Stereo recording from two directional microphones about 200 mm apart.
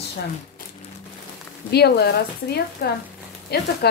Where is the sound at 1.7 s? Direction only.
55° left (ahead or behind).